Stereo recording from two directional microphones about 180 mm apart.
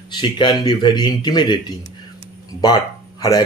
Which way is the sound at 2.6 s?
20° left (ahead or behind).